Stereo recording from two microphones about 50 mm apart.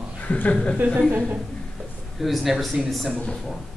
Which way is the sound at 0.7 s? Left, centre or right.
Right.